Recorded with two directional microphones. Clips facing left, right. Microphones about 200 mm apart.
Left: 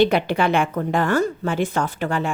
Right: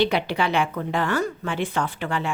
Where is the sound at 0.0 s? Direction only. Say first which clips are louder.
Left 4 dB; 50° left (ahead or behind).